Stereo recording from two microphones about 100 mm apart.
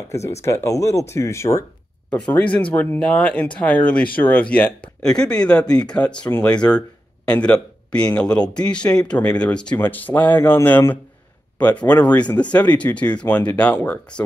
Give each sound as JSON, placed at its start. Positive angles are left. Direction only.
{"t": 0.4, "sound": "speech", "side_deg": 30}
{"t": 2.1, "sound": "speech", "side_deg": 10}
{"t": 7.2, "sound": "speech", "side_deg": 10}